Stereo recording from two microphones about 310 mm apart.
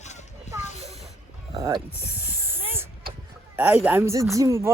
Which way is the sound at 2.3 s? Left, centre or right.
Centre.